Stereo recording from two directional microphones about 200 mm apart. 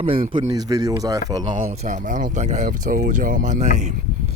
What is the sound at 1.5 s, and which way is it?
Speech, 35° right (ahead or behind).